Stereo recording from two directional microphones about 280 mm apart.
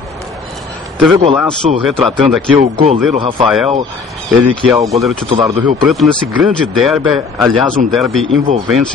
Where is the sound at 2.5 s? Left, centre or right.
Right.